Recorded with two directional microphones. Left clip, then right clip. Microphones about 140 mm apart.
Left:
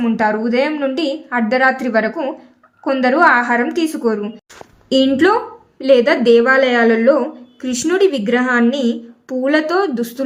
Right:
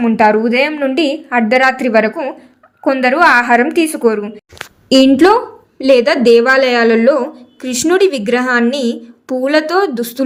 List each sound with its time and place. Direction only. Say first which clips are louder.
0.2 s a woman's voice: right 6 dB; 30° right (ahead or behind)